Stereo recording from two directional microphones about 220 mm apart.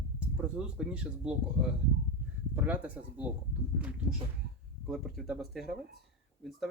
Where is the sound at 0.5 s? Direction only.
5° right (ahead or behind).